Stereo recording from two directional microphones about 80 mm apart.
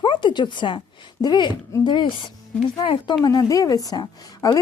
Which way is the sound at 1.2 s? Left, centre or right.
Left.